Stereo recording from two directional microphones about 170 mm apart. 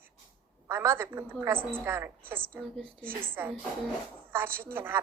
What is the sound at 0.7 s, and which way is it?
A woman's voice, 15° right (ahead or behind).